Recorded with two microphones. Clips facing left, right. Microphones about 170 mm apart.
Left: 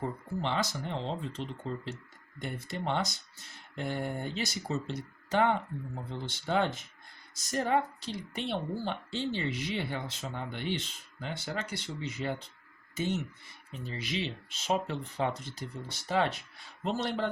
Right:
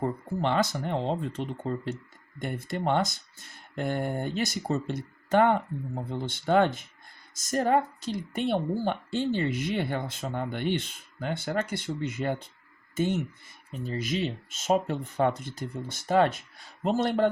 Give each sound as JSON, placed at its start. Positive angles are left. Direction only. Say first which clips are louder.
{"t": 0.0, "sound": "a woman's voice", "louder": "right 6 dB", "side_deg": -55}